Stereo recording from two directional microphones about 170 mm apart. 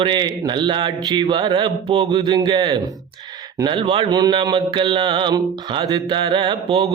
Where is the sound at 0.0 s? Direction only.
25° right (ahead or behind).